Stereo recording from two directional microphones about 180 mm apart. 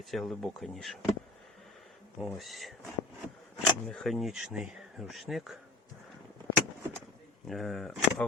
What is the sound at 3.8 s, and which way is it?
Speech, centre (ahead or behind).